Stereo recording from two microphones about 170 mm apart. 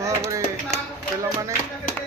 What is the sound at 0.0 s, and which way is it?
Tap, 20° right (ahead or behind).